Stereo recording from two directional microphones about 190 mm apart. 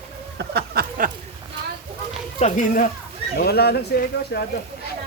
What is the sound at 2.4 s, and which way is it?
Speech, 40° left (ahead or behind).